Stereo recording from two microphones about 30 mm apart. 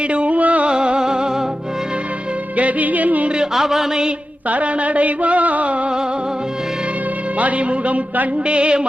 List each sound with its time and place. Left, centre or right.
0.1 s music: right
0.7 s music: right
2.6 s music: right
3.2 s speech: right
3.5 s music: centre
4.4 s music: right
7.3 s music: right
8.4 s a sound: right